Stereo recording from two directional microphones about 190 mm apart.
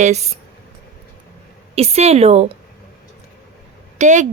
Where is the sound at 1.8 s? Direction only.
35° right (ahead or behind).